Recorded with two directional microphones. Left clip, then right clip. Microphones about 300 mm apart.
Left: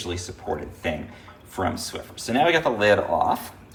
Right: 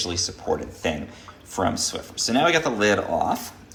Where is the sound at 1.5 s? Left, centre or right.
Centre.